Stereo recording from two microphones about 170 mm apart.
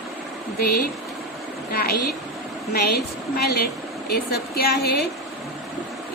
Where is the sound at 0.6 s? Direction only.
60° left (ahead or behind).